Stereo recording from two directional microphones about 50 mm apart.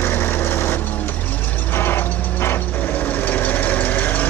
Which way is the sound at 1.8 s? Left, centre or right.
Left.